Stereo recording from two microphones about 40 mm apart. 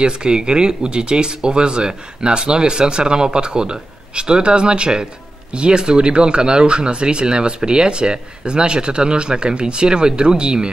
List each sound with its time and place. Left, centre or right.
0.0 s speech: right